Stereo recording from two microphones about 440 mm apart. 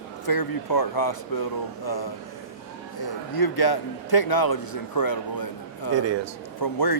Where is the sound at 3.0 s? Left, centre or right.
Left.